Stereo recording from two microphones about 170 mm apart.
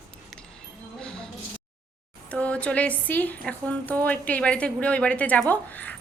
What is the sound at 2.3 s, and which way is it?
A woman's voice, 5° left (ahead or behind).